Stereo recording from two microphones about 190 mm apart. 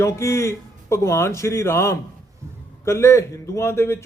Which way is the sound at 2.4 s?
15° right (ahead or behind).